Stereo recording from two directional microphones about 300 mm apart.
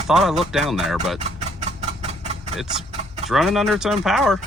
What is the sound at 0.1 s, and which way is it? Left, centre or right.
Speech, centre.